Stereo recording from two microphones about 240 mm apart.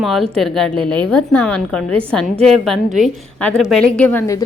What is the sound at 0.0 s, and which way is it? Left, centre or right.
A woman's voice, centre.